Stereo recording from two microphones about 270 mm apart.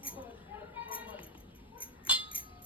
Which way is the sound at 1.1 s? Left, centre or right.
Centre.